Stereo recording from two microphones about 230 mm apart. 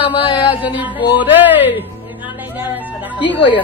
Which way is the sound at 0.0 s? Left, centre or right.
Left.